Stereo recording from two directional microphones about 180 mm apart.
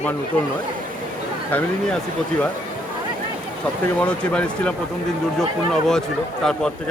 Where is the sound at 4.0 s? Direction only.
5° left (ahead or behind).